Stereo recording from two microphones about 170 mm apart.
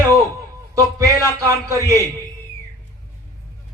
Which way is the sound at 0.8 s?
20° right (ahead or behind).